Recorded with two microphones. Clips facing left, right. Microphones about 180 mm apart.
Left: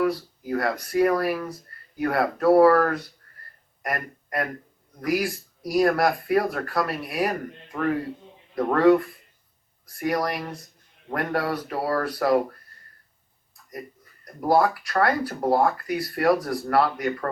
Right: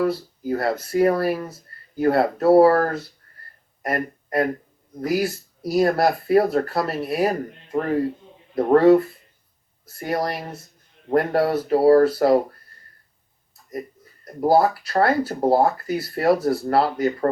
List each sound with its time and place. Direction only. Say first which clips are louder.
0.0 s speech: right 2 dB; 30° right (ahead or behind)
14.4 s speech: right 3 dB; 30° right (ahead or behind)